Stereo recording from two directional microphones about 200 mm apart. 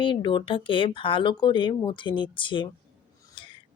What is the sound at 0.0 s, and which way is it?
Speech, 25° left (ahead or behind).